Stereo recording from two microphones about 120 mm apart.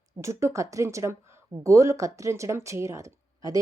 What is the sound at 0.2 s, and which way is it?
A woman's voice, 25° right (ahead or behind).